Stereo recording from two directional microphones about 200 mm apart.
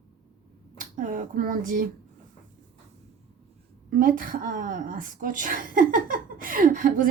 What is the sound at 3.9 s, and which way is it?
A woman's voice, 45° right (ahead or behind).